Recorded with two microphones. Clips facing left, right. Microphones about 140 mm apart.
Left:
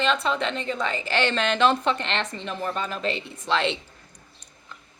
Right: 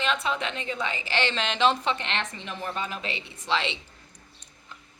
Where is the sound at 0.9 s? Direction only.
45° left (ahead or behind).